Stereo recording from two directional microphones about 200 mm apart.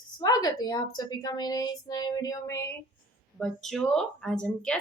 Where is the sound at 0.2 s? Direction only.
20° left (ahead or behind).